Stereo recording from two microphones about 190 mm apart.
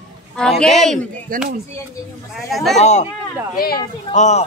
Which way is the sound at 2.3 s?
Centre (ahead or behind).